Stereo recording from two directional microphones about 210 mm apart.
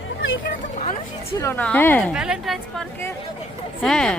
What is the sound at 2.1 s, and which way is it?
Speech, 5° right (ahead or behind).